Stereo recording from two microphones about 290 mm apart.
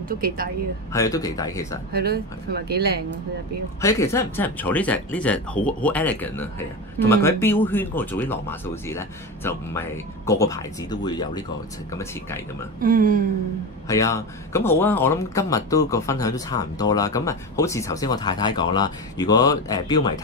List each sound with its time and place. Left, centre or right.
0.9 s speech: centre
1.9 s speech: right
3.8 s speech: centre
12.8 s speech: right
13.8 s speech: centre